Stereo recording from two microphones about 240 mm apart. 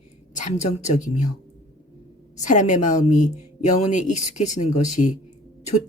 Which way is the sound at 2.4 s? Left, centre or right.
Left.